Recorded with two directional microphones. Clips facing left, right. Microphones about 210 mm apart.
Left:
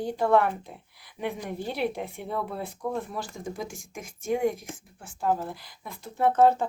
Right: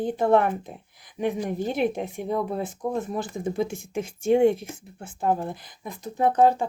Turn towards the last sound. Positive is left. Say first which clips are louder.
# right 1 dB
turn(degrees=-15)  # may be behind; listen again after turning